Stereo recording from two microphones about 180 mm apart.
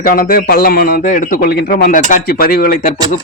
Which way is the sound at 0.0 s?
55° left (ahead or behind).